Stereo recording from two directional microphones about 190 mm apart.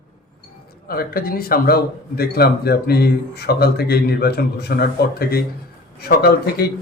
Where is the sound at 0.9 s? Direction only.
50° left (ahead or behind).